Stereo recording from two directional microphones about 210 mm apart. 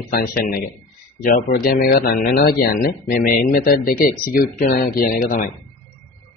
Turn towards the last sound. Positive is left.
turn(degrees=45)  # may be behind; listen again after turning